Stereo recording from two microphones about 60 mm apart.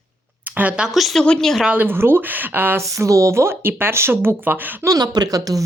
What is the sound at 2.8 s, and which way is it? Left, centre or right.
Speech, right.